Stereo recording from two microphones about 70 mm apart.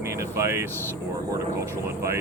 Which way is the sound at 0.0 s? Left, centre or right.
Right.